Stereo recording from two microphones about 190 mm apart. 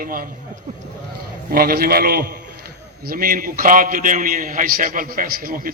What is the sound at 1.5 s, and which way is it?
A man's voice, 50° right (ahead or behind).